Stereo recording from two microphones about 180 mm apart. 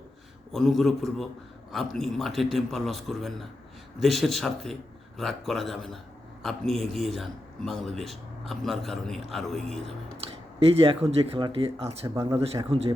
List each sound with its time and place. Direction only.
0.5 s a man's voice: centre (ahead or behind)
10.7 s speech: 30° right (ahead or behind)
12.0 s speech: 20° right (ahead or behind)